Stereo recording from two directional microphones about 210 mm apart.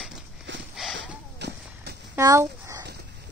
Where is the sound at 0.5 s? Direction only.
60° right (ahead or behind).